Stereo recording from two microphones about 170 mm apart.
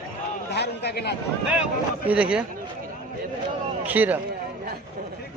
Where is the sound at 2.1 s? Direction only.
5° right (ahead or behind).